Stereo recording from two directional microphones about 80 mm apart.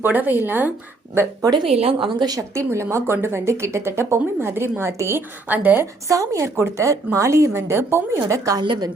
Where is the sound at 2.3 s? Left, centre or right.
Right.